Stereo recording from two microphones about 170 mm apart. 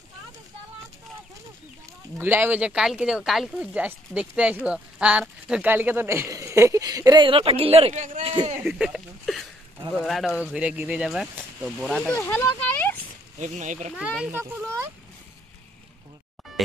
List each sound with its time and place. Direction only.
2.1 s speech: 10° right (ahead or behind); by 8.4 s 40° right (ahead or behind)
8.6 s speech: 5° right (ahead or behind)
12.2 s speech: 15° left (ahead or behind)
13.4 s speech: 45° right (ahead or behind)
13.9 s speech: 10° right (ahead or behind)
16.6 s music: centre (ahead or behind)